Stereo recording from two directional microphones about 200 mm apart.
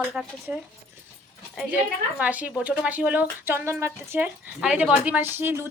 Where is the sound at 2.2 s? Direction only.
5° right (ahead or behind).